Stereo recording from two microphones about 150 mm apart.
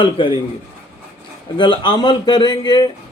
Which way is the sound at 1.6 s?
30° left (ahead or behind).